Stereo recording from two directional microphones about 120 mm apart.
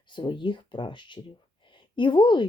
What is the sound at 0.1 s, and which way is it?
Speech, 40° left (ahead or behind).